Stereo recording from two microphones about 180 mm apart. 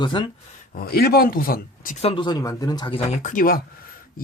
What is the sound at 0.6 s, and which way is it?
Speech, 50° left (ahead or behind).